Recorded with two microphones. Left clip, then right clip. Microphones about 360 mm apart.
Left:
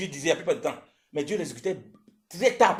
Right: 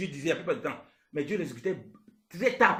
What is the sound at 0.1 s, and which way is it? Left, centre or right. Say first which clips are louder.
Speech: left 6 dB; left.